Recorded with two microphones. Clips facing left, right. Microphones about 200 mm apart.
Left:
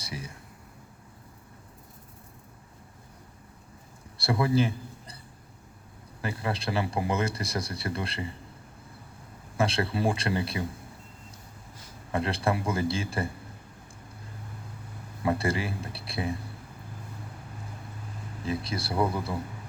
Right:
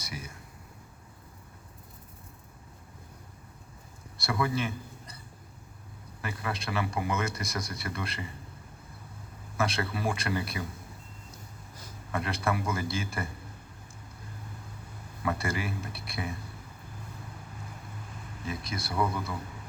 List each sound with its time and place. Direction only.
0.0 s a sound: 30° left (ahead or behind)
4.2 s a sound: 30° left (ahead or behind)
6.2 s speech: 30° left (ahead or behind)
9.6 s speech: 30° left (ahead or behind)
12.1 s speech: 30° left (ahead or behind)
15.2 s speech: 30° left (ahead or behind)
18.4 s speech: 30° left (ahead or behind)